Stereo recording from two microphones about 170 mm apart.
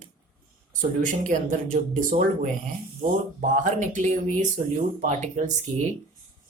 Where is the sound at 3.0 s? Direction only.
55° right (ahead or behind).